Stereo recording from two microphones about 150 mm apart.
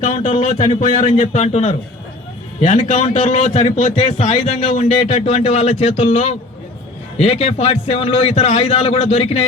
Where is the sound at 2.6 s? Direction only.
60° left (ahead or behind).